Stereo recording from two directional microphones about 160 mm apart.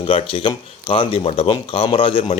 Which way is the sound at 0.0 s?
35° left (ahead or behind).